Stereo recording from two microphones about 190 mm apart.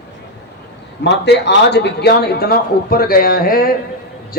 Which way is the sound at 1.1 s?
65° left (ahead or behind).